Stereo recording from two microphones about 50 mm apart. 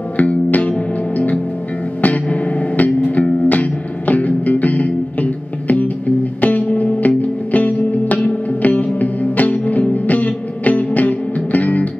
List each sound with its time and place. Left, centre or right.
0.2 s music: left